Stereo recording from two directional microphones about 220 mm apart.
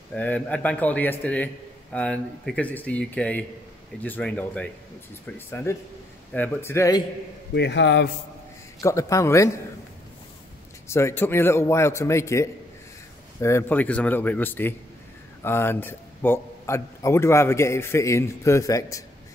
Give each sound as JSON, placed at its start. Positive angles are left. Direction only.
{"t": 0.1, "sound": "a man's voice", "side_deg": 5}
{"t": 7.5, "sound": "a man's voice", "side_deg": 50}
{"t": 8.8, "sound": "a man's voice", "side_deg": 15}
{"t": 10.9, "sound": "a man's voice", "side_deg": 10}